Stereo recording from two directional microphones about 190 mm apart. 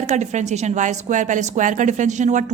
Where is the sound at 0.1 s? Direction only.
40° right (ahead or behind).